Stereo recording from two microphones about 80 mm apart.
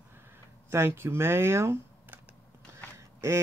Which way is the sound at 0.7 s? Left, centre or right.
Right.